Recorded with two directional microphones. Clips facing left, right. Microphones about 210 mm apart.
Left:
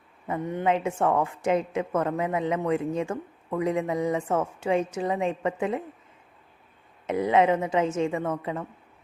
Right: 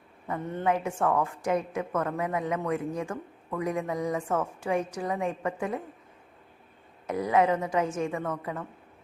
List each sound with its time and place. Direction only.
0.3 s a woman's voice: 15° left (ahead or behind)
7.1 s a woman's voice: 25° left (ahead or behind)